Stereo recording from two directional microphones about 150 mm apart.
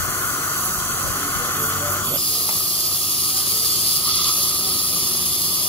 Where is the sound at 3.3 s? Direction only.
40° left (ahead or behind).